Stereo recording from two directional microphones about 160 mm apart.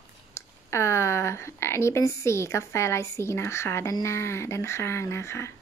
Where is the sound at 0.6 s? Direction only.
15° left (ahead or behind).